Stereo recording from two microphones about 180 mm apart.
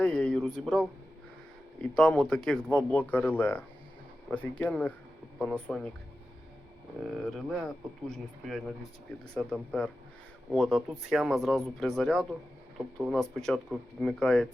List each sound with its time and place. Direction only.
0.0 s a man's voice: 5° left (ahead or behind)
7.3 s speech: centre (ahead or behind)